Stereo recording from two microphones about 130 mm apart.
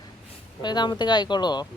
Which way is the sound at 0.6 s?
35° left (ahead or behind).